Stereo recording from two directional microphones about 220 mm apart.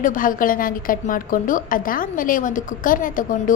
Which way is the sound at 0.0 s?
40° left (ahead or behind).